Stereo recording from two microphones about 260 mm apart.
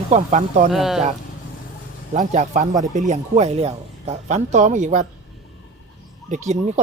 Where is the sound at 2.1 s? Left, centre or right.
Right.